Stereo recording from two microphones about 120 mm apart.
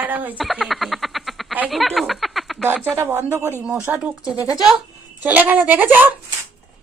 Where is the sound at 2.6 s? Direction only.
15° right (ahead or behind).